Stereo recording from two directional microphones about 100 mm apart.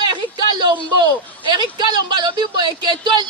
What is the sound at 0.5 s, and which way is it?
Speech, 45° right (ahead or behind).